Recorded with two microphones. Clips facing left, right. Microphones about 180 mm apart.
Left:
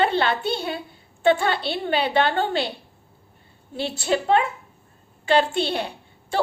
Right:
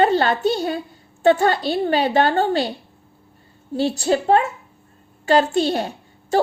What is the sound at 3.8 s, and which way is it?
A woman's voice, 40° right (ahead or behind).